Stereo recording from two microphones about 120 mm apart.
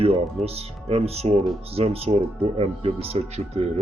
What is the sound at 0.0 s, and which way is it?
Speech, 55° right (ahead or behind).